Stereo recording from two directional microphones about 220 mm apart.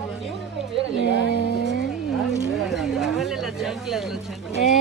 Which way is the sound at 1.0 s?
50° left (ahead or behind).